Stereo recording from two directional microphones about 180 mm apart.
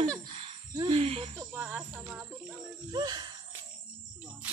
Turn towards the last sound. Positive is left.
turn(degrees=-25)  # may be behind; listen again after turning